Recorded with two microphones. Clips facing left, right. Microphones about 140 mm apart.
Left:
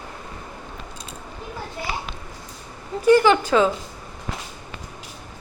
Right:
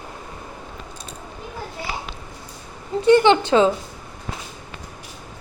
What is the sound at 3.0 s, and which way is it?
Speech, 25° right (ahead or behind).